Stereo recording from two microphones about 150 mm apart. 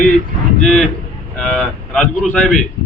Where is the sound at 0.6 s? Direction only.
Centre (ahead or behind).